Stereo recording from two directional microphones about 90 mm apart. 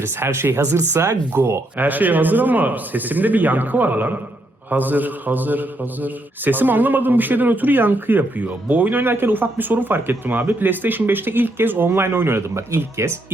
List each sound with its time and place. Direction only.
0.0 s a man's voice: 30° right (ahead or behind)